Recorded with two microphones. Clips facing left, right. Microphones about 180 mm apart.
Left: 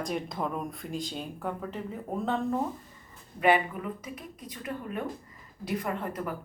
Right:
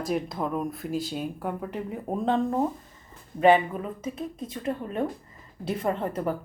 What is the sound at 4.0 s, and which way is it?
Speech, 25° right (ahead or behind).